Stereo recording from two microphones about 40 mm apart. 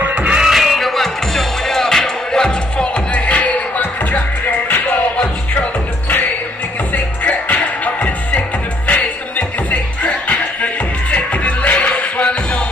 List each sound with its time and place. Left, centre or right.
0.0 s music: right
0.4 s music: centre
3.2 s music: left
7.2 s music: left